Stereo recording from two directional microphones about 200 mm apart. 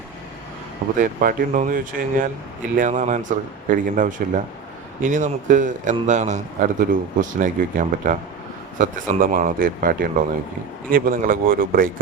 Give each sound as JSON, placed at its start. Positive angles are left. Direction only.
{"t": 0.9, "sound": "a man's voice", "side_deg": -45}